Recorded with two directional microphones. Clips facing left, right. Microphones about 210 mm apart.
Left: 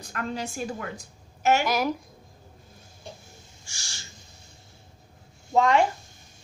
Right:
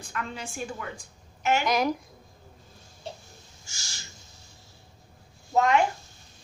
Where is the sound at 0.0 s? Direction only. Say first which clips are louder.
Left 4 dB; 40° left (ahead or behind).